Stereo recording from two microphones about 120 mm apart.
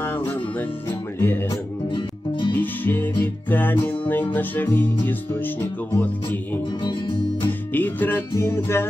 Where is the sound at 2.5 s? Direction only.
15° left (ahead or behind).